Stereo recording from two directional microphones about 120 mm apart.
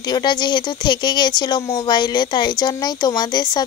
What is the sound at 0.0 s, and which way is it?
Speech, 40° left (ahead or behind).